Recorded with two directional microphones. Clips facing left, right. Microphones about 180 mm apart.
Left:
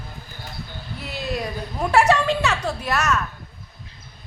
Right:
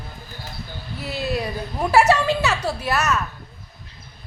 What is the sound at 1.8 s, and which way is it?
A woman's voice, centre (ahead or behind).